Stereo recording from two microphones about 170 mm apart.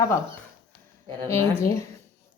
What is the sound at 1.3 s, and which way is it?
Speech, 20° left (ahead or behind).